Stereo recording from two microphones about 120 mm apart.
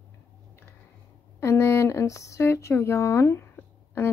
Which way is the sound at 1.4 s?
25° left (ahead or behind).